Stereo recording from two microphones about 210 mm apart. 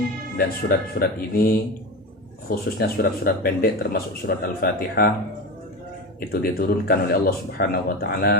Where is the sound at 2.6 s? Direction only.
45° left (ahead or behind).